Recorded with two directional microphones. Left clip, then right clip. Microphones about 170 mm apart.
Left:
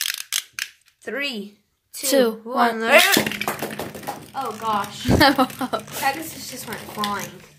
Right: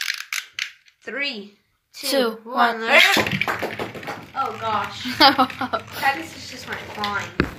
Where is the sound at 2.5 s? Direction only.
30° left (ahead or behind).